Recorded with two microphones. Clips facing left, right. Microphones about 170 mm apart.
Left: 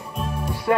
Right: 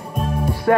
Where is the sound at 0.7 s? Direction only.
50° right (ahead or behind).